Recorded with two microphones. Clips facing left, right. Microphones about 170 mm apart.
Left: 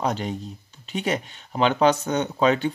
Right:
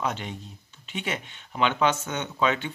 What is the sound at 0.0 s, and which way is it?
Speech, 40° left (ahead or behind).